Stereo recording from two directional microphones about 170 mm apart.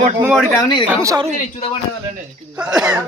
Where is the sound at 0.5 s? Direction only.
25° left (ahead or behind).